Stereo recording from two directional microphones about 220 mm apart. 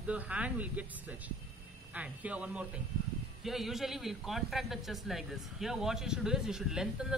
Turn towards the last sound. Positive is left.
turn(degrees=-5)  # may be behind; listen again after turning